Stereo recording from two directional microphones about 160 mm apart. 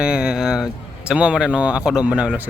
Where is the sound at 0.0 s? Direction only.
5° right (ahead or behind).